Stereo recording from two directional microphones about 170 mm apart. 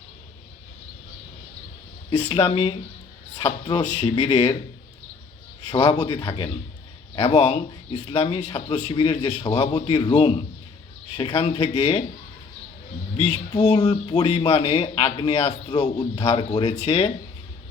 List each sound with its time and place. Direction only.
2.0 s a man's voice: 35° left (ahead or behind)
3.8 s speech: 40° left (ahead or behind)
5.7 s a man's voice: 30° left (ahead or behind)
13.1 s speech: 35° left (ahead or behind)